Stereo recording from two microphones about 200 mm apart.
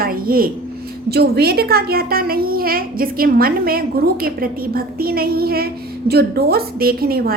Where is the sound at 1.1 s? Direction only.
50° right (ahead or behind).